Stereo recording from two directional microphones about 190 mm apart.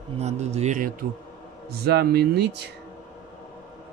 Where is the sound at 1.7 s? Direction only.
55° right (ahead or behind).